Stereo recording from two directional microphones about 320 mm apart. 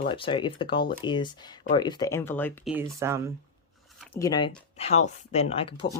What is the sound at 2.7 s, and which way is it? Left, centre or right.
Speech, centre.